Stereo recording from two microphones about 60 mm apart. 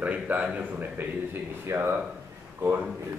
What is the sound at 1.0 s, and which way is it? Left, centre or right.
Speech, right.